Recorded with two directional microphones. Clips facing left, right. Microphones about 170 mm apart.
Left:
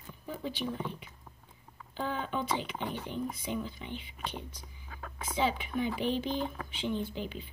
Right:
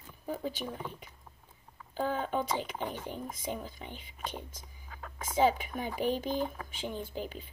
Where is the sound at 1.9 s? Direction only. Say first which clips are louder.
Right 3 dB; 40° right (ahead or behind).